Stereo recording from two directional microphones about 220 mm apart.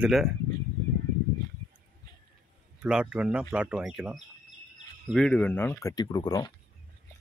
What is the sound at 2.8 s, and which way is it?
Speech, 5° right (ahead or behind).